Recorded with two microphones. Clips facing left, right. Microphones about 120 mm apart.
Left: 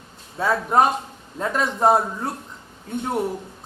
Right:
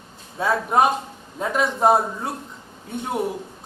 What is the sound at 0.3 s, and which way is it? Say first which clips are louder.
A man's voice: left 1 dB; 5° right (ahead or behind).